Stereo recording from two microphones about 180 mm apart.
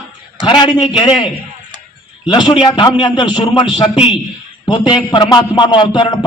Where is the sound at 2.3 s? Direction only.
25° left (ahead or behind).